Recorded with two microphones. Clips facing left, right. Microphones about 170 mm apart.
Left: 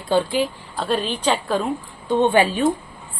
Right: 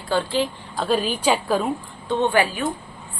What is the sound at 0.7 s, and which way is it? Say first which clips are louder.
Speech: right 1 dB; centre (ahead or behind).